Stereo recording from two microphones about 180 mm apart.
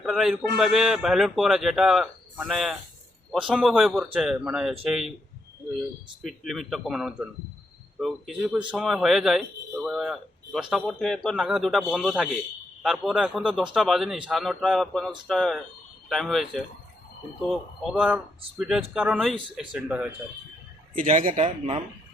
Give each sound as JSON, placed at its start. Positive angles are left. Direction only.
{"t": 0.0, "sound": "speech", "side_deg": 0}
{"t": 6.2, "sound": "speech", "side_deg": 0}
{"t": 20.9, "sound": "speech", "side_deg": -45}